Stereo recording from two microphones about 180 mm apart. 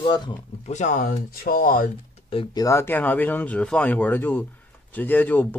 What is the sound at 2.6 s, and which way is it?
Speech, 15° left (ahead or behind).